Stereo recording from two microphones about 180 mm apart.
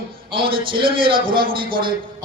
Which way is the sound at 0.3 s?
30° right (ahead or behind).